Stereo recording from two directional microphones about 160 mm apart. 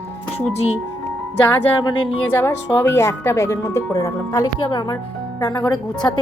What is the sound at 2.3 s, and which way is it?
A woman's voice, 15° left (ahead or behind).